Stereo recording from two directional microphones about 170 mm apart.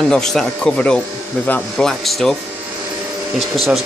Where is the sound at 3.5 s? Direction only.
Centre (ahead or behind).